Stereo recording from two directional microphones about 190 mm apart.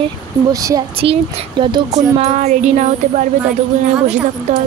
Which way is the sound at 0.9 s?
30° right (ahead or behind).